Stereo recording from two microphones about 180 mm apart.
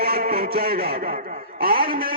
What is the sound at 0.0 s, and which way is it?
A man's voice, 55° right (ahead or behind).